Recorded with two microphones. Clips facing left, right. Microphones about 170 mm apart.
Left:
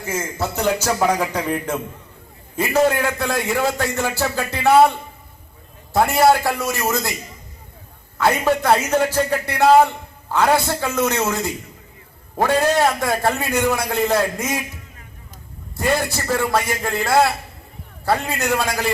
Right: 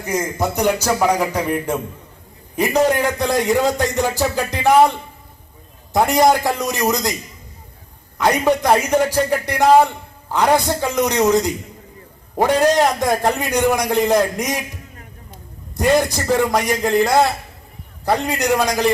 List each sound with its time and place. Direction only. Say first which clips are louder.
0.0 s a man's voice: right 4 dB; 15° right (ahead or behind)
5.9 s a man's voice: right 1 dB; 15° right (ahead or behind)
8.2 s a man's voice: right 2 dB; 15° right (ahead or behind)
15.8 s a man's voice: right 5 dB; 15° right (ahead or behind)